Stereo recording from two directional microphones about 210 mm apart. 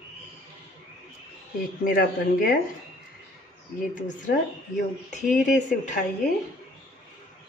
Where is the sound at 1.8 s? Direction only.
40° left (ahead or behind).